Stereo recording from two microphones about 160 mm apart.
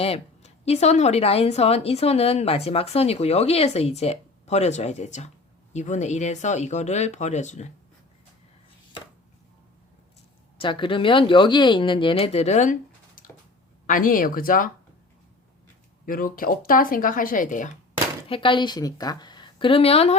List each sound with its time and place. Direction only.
0.0 s speech: 40° left (ahead or behind)
10.6 s speech: 30° left (ahead or behind)
13.8 s speech: 60° left (ahead or behind)
16.0 s speech: 65° left (ahead or behind)
18.3 s a woman's voice: 30° left (ahead or behind)